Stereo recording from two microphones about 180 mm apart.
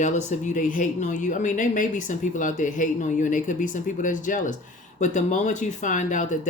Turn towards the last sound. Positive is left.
turn(degrees=45)  # may be behind; listen again after turning